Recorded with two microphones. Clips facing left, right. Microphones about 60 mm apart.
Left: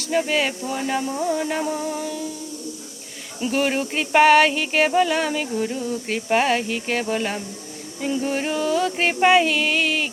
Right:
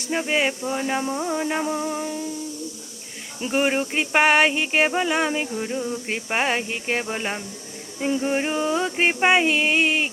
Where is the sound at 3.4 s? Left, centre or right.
Right.